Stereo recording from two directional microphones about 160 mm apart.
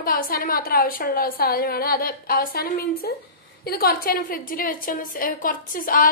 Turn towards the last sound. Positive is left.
turn(degrees=60)  # may be behind; listen again after turning